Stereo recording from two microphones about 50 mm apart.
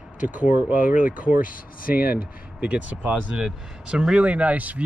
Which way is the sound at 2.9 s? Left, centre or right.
Centre.